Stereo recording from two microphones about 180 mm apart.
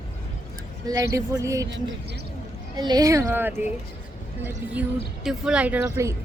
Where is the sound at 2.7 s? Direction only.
20° right (ahead or behind).